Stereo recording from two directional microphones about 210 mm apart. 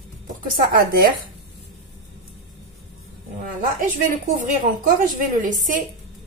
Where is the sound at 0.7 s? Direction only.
45° right (ahead or behind).